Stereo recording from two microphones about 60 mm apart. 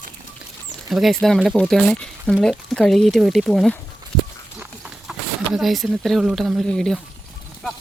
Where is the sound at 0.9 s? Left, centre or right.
Centre.